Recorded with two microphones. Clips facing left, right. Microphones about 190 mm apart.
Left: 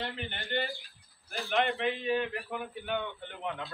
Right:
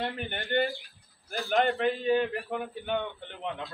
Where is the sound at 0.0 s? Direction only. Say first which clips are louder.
Right 4 dB; 50° right (ahead or behind).